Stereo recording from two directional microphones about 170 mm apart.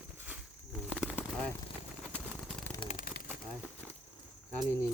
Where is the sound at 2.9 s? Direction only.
60° left (ahead or behind).